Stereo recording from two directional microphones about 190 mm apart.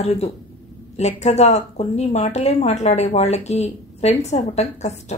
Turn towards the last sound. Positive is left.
turn(degrees=35)  # may be behind; listen again after turning